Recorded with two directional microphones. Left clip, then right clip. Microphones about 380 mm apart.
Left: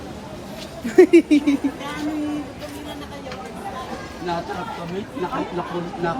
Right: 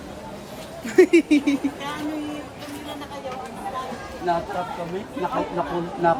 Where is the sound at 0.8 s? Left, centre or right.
Centre.